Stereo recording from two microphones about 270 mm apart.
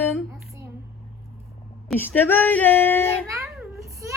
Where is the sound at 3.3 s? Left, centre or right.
Centre.